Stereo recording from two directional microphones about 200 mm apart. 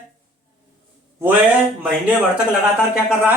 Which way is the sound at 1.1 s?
10° right (ahead or behind).